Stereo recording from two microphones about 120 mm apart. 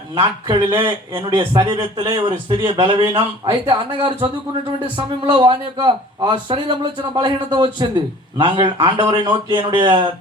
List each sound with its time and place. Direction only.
0.1 s a man's voice: 40° right (ahead or behind)